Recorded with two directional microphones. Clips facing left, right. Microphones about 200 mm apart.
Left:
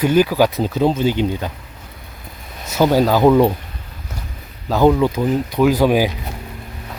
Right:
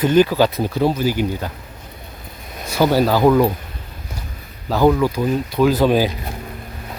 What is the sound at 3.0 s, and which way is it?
Speech, 15° left (ahead or behind).